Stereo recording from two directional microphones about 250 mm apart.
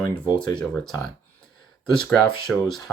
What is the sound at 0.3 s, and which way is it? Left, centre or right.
Speech, centre.